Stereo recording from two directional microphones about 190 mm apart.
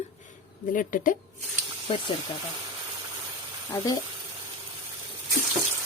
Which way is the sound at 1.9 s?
30° left (ahead or behind).